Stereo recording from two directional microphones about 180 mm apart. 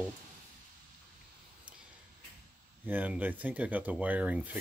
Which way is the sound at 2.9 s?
10° right (ahead or behind).